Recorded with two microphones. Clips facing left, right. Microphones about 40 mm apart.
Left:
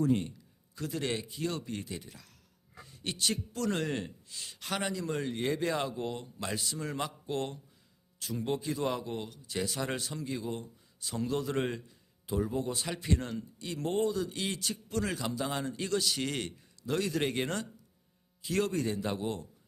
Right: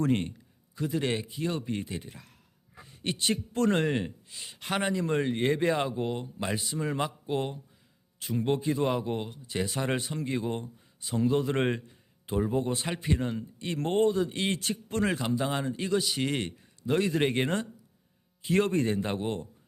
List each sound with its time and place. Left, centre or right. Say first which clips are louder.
0.1 s a man's voice: right 2 dB; right
0.9 s speech: right 4 dB; right
8.2 s speech: right 5 dB; right
10.2 s speech: right 5 dB; right
11.0 s speech: right 6 dB; right
11.5 s speech: right 5 dB; right
13.6 s speech: right 5 dB; right